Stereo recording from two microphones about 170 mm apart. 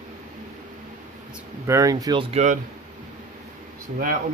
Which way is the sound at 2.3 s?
45° right (ahead or behind).